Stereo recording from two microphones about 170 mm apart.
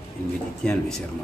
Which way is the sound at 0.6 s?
5° left (ahead or behind).